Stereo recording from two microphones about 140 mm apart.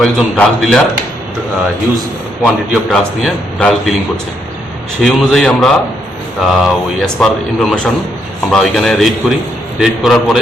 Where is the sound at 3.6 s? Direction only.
5° left (ahead or behind).